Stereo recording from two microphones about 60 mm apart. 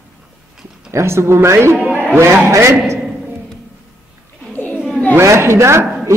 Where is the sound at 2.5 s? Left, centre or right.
Right.